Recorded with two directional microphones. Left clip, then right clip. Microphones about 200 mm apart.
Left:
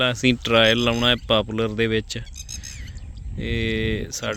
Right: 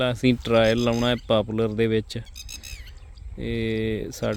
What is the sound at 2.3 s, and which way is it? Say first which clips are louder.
Whispering: left 2 dB; 70° right (ahead or behind).